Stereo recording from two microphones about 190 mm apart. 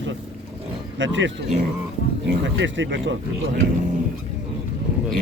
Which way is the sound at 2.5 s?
75° right (ahead or behind).